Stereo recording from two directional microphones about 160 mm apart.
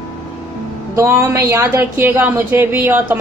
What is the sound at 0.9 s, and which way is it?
A woman's voice, 20° right (ahead or behind).